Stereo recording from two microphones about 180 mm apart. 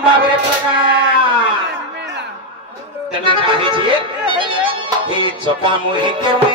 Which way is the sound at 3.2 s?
30° right (ahead or behind).